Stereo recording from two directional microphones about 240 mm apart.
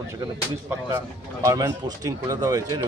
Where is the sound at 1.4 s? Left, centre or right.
Centre.